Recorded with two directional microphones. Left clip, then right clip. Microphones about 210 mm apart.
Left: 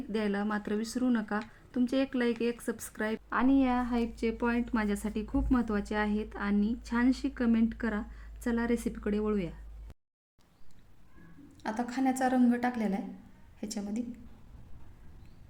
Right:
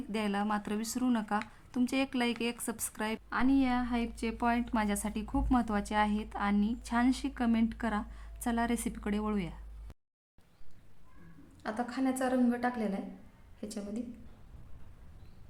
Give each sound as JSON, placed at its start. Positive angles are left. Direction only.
{"t": 0.1, "sound": "a woman's voice", "side_deg": -20}
{"t": 11.6, "sound": "a woman's voice", "side_deg": 10}